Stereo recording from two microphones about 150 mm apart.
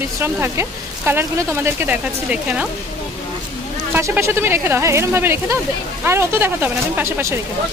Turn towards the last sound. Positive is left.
turn(degrees=-20)  # may be behind; listen again after turning